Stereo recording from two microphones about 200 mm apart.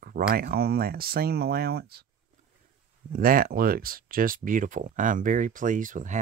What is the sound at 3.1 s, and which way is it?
Speech, 45° right (ahead or behind).